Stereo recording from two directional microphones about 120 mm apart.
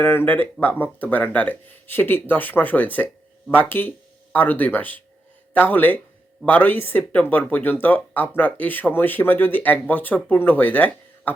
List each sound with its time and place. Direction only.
0.0 s speech: 15° left (ahead or behind)